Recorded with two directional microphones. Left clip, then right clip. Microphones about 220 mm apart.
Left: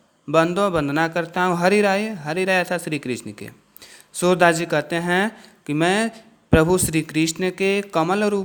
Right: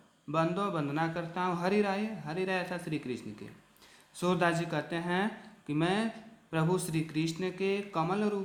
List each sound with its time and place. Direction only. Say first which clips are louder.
0.3 s a man's voice: left 13 dB; 40° left (ahead or behind)